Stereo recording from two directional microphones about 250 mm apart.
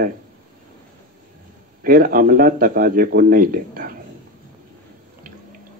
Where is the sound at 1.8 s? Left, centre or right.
Right.